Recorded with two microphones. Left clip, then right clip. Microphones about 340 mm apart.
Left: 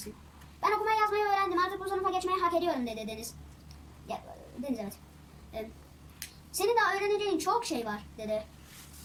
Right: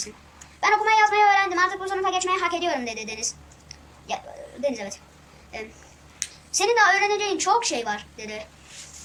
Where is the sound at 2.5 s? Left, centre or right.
Right.